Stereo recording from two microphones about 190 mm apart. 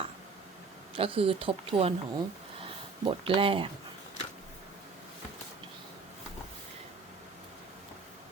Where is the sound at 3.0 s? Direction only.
25° right (ahead or behind).